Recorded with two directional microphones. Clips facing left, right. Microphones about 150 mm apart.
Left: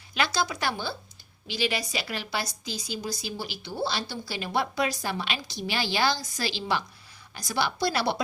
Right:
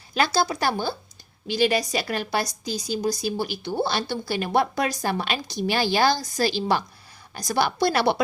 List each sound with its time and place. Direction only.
0.3 s a woman's voice: 35° right (ahead or behind); by 8.1 s 55° right (ahead or behind)